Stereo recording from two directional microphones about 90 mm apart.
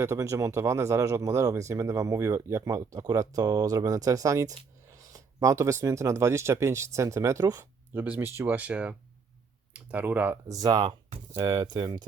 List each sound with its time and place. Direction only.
0.0 s speech: 30° right (ahead or behind)
7.6 s speech: 20° right (ahead or behind)
8.5 s speech: 15° right (ahead or behind)
10.5 s speech: 45° right (ahead or behind)